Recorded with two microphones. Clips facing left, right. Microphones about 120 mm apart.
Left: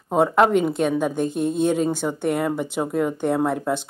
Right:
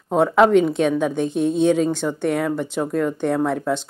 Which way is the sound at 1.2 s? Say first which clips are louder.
Right 2 dB; 50° left (ahead or behind).